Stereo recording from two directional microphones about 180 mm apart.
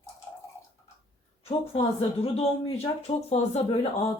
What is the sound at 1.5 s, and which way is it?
Speech, 35° left (ahead or behind).